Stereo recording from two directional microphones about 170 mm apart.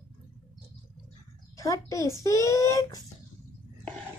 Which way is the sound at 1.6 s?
20° left (ahead or behind).